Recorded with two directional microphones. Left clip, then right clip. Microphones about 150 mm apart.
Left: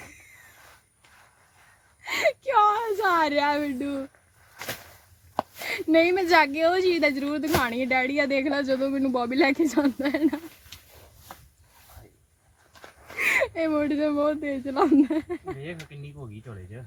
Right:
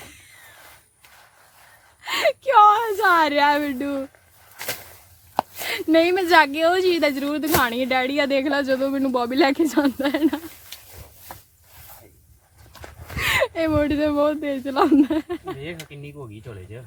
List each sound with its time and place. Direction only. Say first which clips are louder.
2.0 s a sound: right 3 dB; 10° right (ahead or behind)
5.6 s a woman's voice: right 2 dB; 10° right (ahead or behind)
12.8 s speech: right 1 dB; 10° right (ahead or behind)